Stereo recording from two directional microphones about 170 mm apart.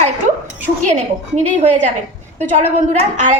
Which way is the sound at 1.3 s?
40° right (ahead or behind).